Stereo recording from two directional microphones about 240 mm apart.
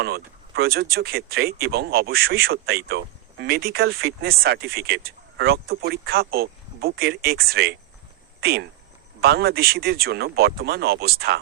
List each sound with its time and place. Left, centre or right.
0.0 s speech: right